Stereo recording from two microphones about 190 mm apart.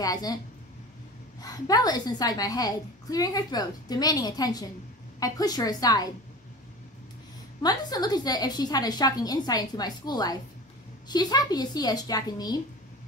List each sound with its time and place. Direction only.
0.0 s a woman's voice: 20° left (ahead or behind)
1.4 s a woman's voice: 20° left (ahead or behind)
7.6 s a woman's voice: 20° left (ahead or behind)